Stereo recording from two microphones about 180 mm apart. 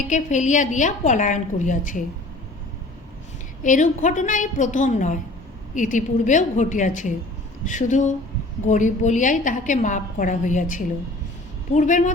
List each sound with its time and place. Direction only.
0.0 s a woman's voice: 45° left (ahead or behind)
3.6 s a woman's voice: 45° left (ahead or behind)